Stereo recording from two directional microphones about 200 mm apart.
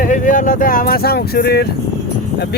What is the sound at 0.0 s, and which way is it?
Speech, 40° left (ahead or behind).